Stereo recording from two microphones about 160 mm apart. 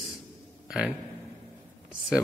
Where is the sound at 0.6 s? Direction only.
5° right (ahead or behind).